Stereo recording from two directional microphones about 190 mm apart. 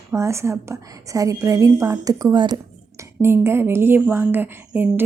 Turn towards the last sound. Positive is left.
turn(degrees=-10)  # may be behind; listen again after turning